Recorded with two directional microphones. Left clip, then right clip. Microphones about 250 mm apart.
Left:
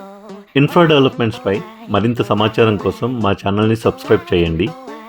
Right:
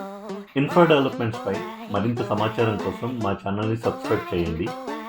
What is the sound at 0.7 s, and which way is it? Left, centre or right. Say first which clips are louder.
Speech: left 5 dB; left.